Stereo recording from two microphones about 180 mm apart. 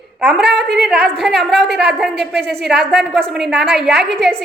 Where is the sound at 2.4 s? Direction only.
65° right (ahead or behind).